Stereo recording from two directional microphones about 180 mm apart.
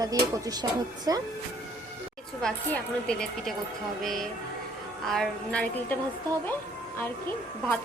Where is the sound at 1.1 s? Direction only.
20° right (ahead or behind).